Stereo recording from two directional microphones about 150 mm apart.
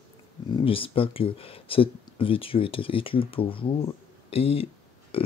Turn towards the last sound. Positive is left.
turn(degrees=40)  # may be behind; listen again after turning